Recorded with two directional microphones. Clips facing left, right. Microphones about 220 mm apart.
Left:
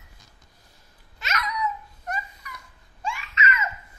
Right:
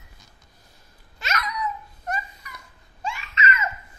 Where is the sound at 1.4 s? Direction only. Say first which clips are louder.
Left 1 dB; 35° right (ahead or behind).